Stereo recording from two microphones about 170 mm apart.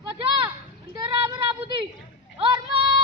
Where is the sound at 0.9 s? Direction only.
35° right (ahead or behind).